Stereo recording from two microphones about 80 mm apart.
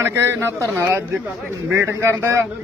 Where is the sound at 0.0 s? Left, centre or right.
Right.